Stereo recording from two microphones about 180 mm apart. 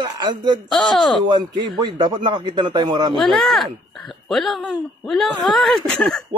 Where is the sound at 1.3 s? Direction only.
25° right (ahead or behind).